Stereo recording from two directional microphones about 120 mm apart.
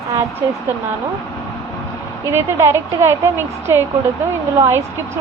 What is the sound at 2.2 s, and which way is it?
Speech, 25° right (ahead or behind).